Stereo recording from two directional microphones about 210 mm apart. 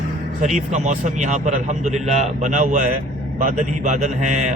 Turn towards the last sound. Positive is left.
turn(degrees=-35)  # may be behind; listen again after turning